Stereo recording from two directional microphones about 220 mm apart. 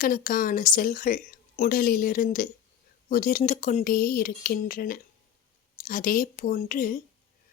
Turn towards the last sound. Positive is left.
turn(degrees=40)  # may be behind; listen again after turning